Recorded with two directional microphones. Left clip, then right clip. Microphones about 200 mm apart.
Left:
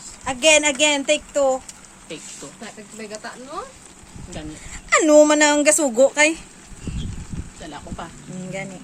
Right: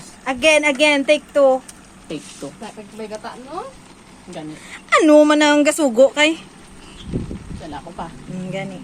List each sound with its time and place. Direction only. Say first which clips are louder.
0.3 s speech: right 1 dB; centre (ahead or behind)
4.9 s speech: right 2 dB; centre (ahead or behind)